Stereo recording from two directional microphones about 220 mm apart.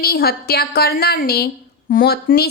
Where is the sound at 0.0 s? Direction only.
45° left (ahead or behind).